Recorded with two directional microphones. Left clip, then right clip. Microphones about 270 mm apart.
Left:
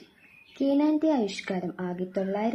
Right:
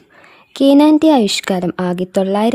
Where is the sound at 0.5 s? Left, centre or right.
Right.